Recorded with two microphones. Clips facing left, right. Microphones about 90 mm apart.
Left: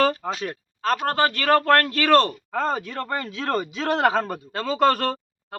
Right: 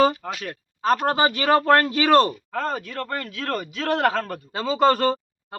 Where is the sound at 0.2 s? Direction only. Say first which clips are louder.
Left 3 dB; 10° left (ahead or behind).